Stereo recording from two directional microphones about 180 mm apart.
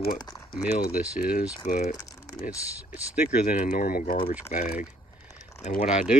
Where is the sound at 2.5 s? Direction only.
10° right (ahead or behind).